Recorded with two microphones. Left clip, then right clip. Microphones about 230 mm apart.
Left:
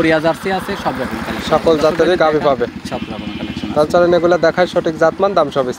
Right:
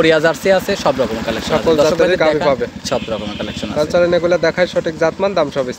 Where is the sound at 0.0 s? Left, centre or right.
Right.